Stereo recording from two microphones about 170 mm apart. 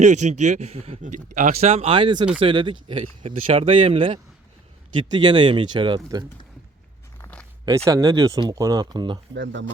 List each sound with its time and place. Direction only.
0.0 s speech: 45° right (ahead or behind); by 6.2 s 25° right (ahead or behind)
7.2 s a sound: 10° left (ahead or behind)
7.9 s speech: 20° right (ahead or behind)
9.3 s speech: 90° right